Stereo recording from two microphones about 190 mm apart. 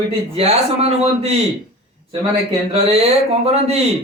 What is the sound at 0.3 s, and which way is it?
Speech, 30° right (ahead or behind).